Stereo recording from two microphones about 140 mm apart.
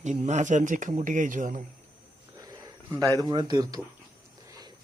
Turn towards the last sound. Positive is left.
turn(degrees=-25)  # may be behind; listen again after turning